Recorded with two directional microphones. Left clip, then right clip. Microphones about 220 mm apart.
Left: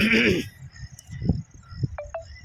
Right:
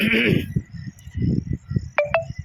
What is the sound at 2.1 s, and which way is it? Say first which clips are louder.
Music: right 12 dB; 35° right (ahead or behind).